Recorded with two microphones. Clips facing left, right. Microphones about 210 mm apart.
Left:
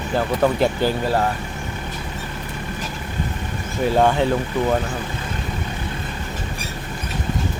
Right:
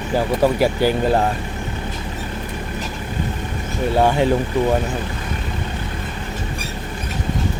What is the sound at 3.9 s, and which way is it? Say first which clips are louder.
Speech: right 2 dB; 10° right (ahead or behind).